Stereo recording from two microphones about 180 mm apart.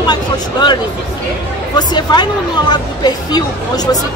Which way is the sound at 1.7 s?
25° left (ahead or behind).